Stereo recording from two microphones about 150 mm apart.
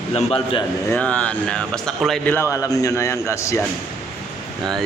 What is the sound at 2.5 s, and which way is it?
A man's voice, 20° left (ahead or behind).